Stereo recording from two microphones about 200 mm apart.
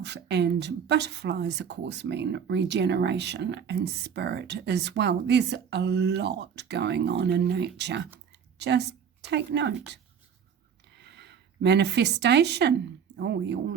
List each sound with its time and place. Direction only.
0.0 s speech: 60° right (ahead or behind)
8.3 s a sound: 60° right (ahead or behind)
9.3 s speech: 60° right (ahead or behind)